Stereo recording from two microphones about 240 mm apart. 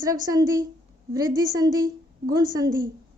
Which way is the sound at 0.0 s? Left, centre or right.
Centre.